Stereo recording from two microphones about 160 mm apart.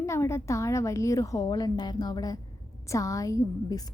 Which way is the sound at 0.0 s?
15° left (ahead or behind).